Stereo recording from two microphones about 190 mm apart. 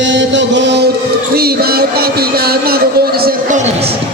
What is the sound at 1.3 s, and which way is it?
Music, 55° right (ahead or behind).